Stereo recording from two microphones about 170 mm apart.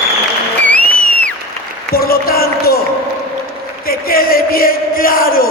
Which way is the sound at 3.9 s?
60° left (ahead or behind).